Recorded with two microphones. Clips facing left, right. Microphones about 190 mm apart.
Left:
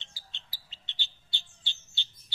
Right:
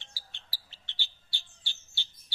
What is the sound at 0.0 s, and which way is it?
Bird, 20° left (ahead or behind).